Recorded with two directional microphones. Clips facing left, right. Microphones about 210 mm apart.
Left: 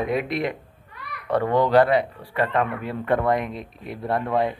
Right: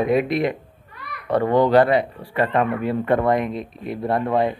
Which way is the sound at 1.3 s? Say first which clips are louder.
Right 3 dB; 15° right (ahead or behind).